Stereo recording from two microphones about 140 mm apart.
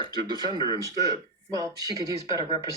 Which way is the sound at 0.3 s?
30° right (ahead or behind).